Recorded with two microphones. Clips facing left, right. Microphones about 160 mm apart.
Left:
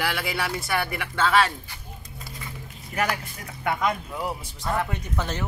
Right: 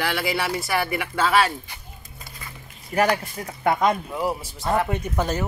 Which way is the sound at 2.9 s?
35° right (ahead or behind).